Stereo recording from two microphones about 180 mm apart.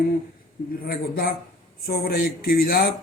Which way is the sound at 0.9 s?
55° left (ahead or behind).